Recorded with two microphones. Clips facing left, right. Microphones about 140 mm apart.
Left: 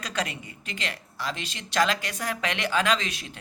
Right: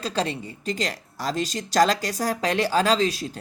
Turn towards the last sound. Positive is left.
turn(degrees=-35)  # may be behind; listen again after turning